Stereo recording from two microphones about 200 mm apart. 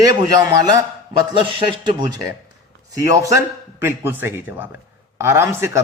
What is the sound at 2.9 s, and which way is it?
A man's voice, 15° right (ahead or behind).